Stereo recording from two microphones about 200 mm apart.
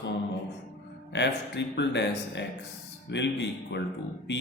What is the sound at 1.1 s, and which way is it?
Speech, 60° left (ahead or behind).